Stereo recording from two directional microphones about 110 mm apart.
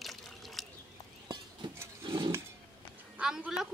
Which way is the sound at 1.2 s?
40° right (ahead or behind).